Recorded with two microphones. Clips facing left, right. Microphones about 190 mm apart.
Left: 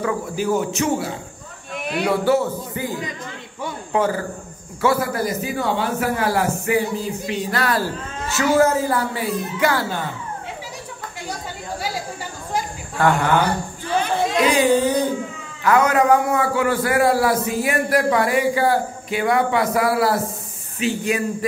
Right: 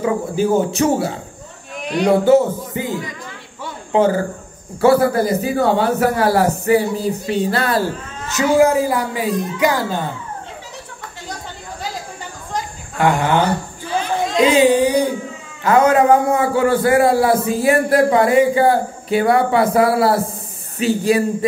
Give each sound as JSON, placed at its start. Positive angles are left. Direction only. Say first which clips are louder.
{"t": 0.0, "sound": "a man's voice", "louder": "right 5 dB", "side_deg": -30}
{"t": 2.0, "sound": "a man's voice", "louder": "right 6 dB", "side_deg": -20}
{"t": 3.9, "sound": "a man's voice", "louder": "right 6 dB", "side_deg": -25}
{"t": 8.3, "sound": "speech", "louder": "right 3 dB", "side_deg": -15}
{"t": 13.0, "sound": "a man's voice", "louder": "right 2 dB", "side_deg": -20}
{"t": 14.4, "sound": "speech", "louder": "right 5 dB", "side_deg": -20}
{"t": 15.6, "sound": "a man's voice", "louder": "right 4 dB", "side_deg": -25}